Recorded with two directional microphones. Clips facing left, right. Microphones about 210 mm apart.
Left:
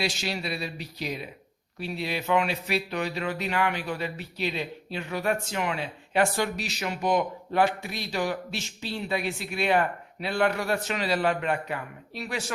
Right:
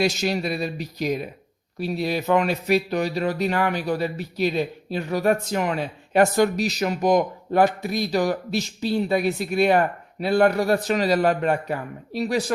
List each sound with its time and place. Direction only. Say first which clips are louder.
0.0 s speech: right 8 dB; 45° right (ahead or behind)